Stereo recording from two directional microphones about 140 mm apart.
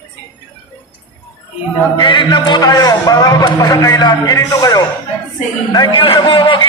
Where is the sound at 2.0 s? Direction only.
35° left (ahead or behind).